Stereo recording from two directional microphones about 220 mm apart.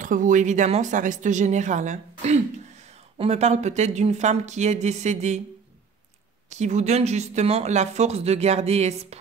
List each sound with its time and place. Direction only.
0.0 s speech: 35° right (ahead or behind)
6.5 s speech: 30° right (ahead or behind)